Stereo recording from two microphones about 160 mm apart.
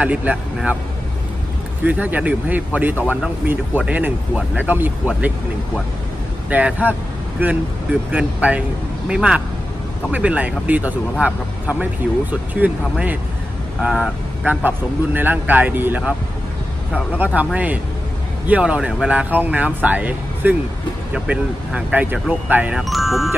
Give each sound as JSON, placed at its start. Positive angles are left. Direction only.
{"t": 0.0, "sound": "speech", "side_deg": -10}
{"t": 1.9, "sound": "speech", "side_deg": -10}
{"t": 6.5, "sound": "speech", "side_deg": -10}
{"t": 17.2, "sound": "speech", "side_deg": -10}